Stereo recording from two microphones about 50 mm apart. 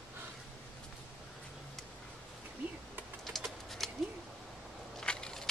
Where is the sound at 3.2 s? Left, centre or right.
Centre.